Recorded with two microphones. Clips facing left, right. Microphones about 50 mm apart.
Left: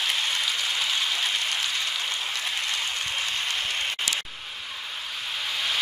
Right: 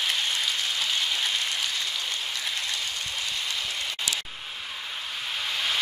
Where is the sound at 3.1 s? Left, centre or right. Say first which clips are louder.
Left 2 dB; left.